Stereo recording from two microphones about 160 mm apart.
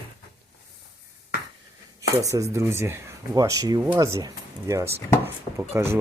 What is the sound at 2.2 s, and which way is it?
Speech, 20° right (ahead or behind).